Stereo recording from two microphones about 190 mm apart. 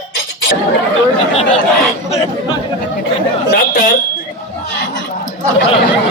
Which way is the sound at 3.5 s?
45° left (ahead or behind).